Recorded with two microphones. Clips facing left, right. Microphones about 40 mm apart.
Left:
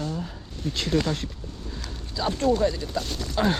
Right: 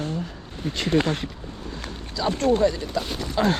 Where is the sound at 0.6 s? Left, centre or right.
Right.